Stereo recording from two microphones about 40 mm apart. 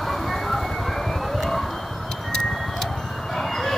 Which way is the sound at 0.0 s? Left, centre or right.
Centre.